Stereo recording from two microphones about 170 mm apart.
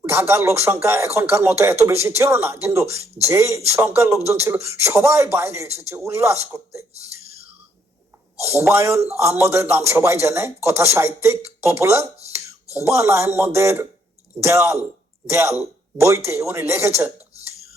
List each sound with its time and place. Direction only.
0.0 s a man's voice: 15° right (ahead or behind)
8.4 s a man's voice: 15° right (ahead or behind)